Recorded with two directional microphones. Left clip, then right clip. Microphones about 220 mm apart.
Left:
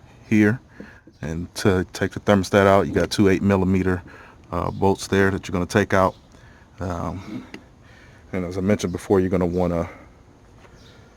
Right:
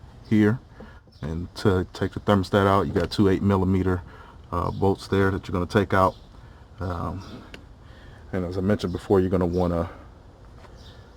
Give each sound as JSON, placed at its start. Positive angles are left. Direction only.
{"t": 0.3, "sound": "speech", "side_deg": 25}
{"t": 8.3, "sound": "speech", "side_deg": 25}